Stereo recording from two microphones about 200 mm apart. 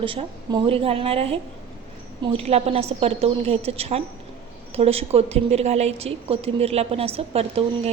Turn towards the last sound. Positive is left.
turn(degrees=-30)  # may be behind; listen again after turning